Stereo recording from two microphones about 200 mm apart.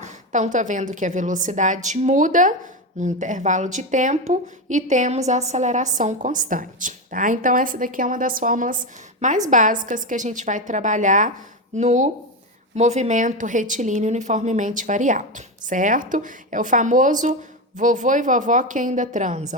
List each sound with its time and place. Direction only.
0.0 s a woman's voice: 35° right (ahead or behind)